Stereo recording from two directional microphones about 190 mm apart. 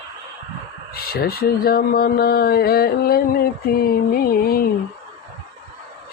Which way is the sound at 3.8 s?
50° left (ahead or behind).